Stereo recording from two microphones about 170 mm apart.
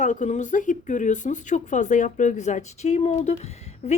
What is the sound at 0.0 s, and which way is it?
A woman's voice, 45° left (ahead or behind).